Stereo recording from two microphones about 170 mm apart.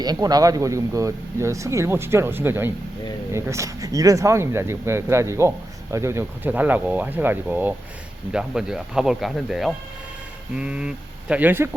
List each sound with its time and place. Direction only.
0.0 s speech: 25° right (ahead or behind)